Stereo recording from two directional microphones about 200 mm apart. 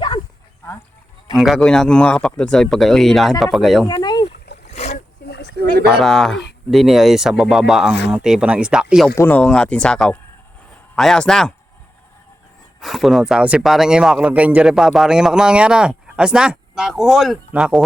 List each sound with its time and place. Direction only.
1.4 s speech: centre (ahead or behind)
3.8 s rowboat: 20° left (ahead or behind)
4.7 s splash: 35° left (ahead or behind)
5.2 s a sound: 55° left (ahead or behind)
5.8 s speech: centre (ahead or behind)
9.1 s speech: 10° left (ahead or behind)
12.8 s speech: centre (ahead or behind)